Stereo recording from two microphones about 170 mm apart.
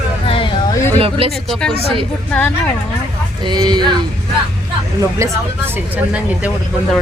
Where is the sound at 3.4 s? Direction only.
25° right (ahead or behind).